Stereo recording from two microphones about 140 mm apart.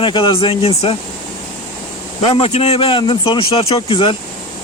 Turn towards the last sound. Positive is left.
turn(degrees=40)  # may be behind; listen again after turning